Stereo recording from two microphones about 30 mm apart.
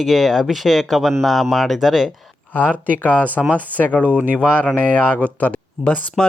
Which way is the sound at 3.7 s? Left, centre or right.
Left.